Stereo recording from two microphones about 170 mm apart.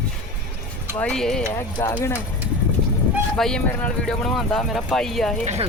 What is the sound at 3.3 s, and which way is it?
A woman's voice, 5° left (ahead or behind).